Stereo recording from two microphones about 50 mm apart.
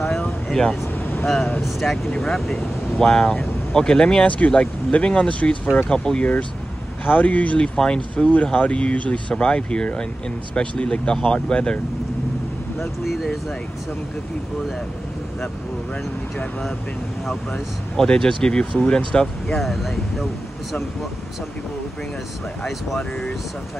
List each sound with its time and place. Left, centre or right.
1.2 s speech: centre
4.3 s speech: left
5.9 s speech: centre
7.1 s speech: left
13.1 s speech: centre
17.5 s speech: centre
19.4 s speech: centre